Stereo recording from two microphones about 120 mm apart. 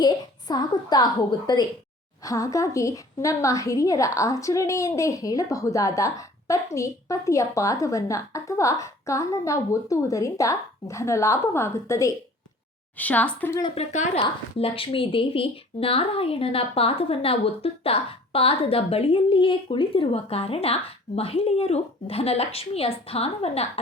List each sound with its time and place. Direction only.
0.0 s a woman's voice: 35° left (ahead or behind)
13.0 s a woman's voice: 15° left (ahead or behind)
13.7 s a woman's voice: 85° left
14.6 s a woman's voice: 50° left (ahead or behind)